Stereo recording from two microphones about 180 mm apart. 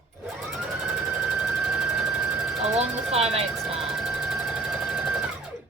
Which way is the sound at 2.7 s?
35° right (ahead or behind).